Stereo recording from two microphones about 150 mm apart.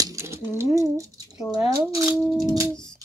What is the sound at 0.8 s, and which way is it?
Speech, 20° right (ahead or behind).